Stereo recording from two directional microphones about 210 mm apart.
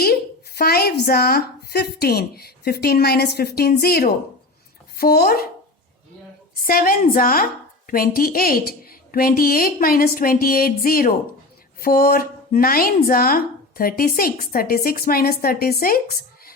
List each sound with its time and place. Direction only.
0.0 s a woman's voice: 50° left (ahead or behind)
6.6 s speech: 45° left (ahead or behind)